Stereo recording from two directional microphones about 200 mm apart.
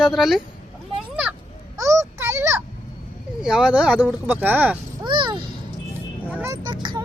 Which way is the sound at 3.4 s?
5° right (ahead or behind).